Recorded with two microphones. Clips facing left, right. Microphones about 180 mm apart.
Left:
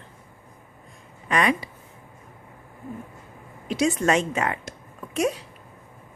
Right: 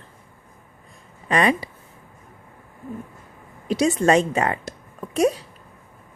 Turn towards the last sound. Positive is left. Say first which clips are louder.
# right 5 dB
turn(degrees=-35)  # may be behind; listen again after turning